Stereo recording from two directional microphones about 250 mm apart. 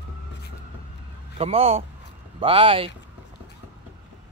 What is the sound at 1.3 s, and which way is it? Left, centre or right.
Speech, right.